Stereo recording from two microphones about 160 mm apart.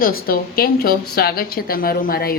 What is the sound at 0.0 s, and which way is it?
A woman's voice, 70° left (ahead or behind).